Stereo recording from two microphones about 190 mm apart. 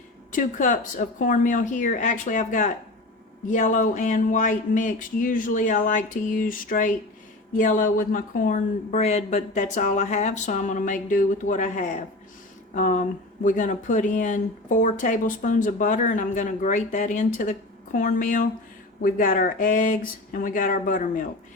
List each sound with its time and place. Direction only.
0.3 s speech: 45° left (ahead or behind)